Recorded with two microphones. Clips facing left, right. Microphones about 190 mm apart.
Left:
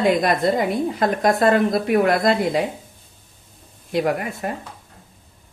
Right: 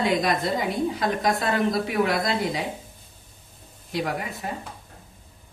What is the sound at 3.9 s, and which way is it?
Speech, 55° left (ahead or behind).